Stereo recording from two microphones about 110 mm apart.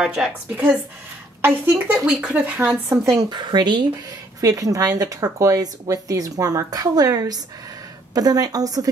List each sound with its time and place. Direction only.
0.0 s a woman's voice: 5° right (ahead or behind)
1.4 s speech: 20° right (ahead or behind)
2.0 s speech: 10° right (ahead or behind)
3.1 s speech: 35° right (ahead or behind)
4.4 s speech: 30° right (ahead or behind)